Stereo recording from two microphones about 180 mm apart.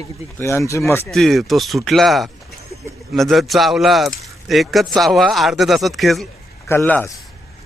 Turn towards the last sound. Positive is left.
turn(degrees=10)  # may be behind; listen again after turning